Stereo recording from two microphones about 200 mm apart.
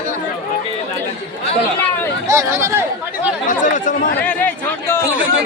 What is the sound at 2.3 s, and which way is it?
Speech, 15° right (ahead or behind).